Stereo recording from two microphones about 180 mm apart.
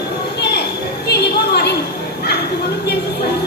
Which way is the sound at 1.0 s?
65° left (ahead or behind).